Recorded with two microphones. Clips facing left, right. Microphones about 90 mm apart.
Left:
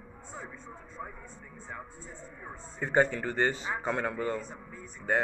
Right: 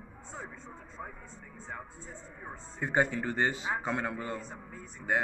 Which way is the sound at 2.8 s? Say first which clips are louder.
Left 3 dB; 10° right (ahead or behind).